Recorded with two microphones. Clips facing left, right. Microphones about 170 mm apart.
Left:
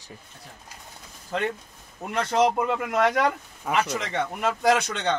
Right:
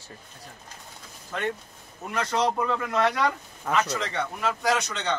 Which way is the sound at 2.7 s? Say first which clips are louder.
Left 2 dB; 15° left (ahead or behind).